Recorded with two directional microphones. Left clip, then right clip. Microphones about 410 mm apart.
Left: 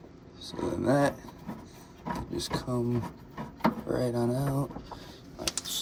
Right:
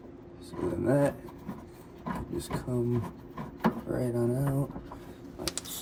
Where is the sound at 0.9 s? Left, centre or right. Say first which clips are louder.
Left 1 dB; centre.